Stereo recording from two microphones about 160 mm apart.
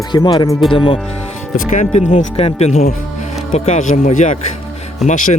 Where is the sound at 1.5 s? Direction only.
50° left (ahead or behind).